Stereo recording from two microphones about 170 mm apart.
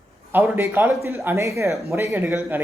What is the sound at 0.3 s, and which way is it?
A man's voice, 10° right (ahead or behind).